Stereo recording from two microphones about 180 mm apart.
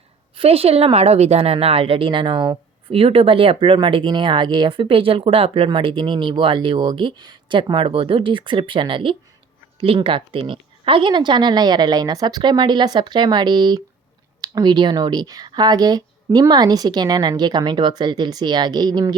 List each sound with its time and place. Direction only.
0.3 s speech: 35° right (ahead or behind)